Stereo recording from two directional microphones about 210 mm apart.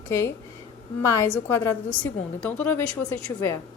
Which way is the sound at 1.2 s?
10° left (ahead or behind).